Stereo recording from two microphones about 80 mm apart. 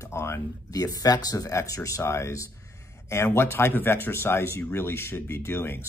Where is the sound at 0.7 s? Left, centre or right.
Left.